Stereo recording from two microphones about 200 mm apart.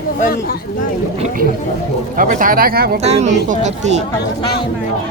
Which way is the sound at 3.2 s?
35° right (ahead or behind).